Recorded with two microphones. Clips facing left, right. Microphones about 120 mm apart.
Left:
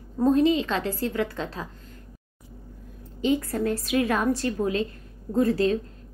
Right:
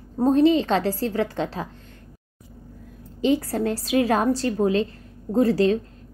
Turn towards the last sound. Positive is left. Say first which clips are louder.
# right 3 dB
turn(degrees=-30)  # may be behind; listen again after turning